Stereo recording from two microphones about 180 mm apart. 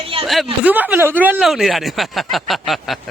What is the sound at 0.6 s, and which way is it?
A man's voice, 10° right (ahead or behind).